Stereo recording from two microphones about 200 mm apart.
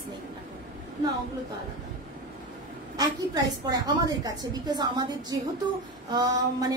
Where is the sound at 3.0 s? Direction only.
20° right (ahead or behind).